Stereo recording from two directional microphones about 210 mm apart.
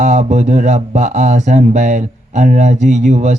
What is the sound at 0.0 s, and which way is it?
Speech, 35° right (ahead or behind).